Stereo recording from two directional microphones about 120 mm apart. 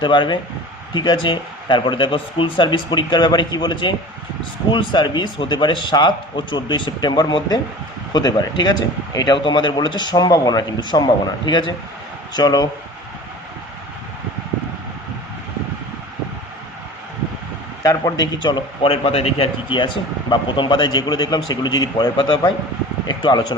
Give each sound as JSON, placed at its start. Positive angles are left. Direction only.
{"t": 0.0, "sound": "a man's voice", "side_deg": 40}
{"t": 17.8, "sound": "a man's voice", "side_deg": 30}